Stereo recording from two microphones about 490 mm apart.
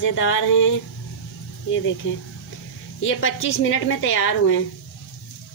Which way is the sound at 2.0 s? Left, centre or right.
Left.